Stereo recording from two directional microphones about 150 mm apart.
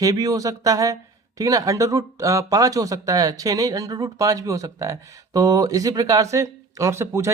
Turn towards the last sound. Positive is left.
turn(degrees=-20)  # may be behind; listen again after turning